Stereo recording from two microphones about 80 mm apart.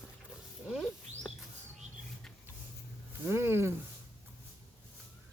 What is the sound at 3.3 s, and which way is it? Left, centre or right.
Speech, right.